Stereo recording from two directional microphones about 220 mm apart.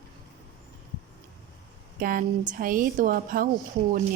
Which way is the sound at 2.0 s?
40° right (ahead or behind).